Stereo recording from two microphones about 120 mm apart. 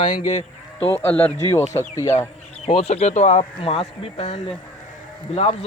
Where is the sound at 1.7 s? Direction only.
25° left (ahead or behind).